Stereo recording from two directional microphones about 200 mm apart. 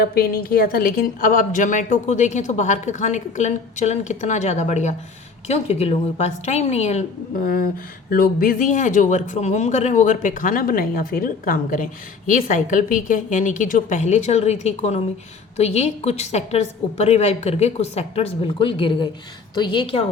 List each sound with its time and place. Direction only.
0.0 s speech: 50° left (ahead or behind); by 7.0 s 35° left (ahead or behind)
7.4 s a woman's voice: 45° left (ahead or behind); by 20.1 s 25° left (ahead or behind)